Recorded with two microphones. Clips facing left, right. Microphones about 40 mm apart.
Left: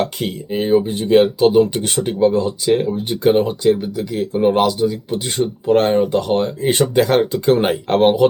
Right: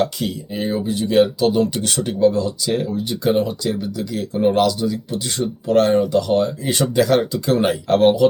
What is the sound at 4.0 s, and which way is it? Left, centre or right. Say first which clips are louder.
Speech: left 2 dB; centre.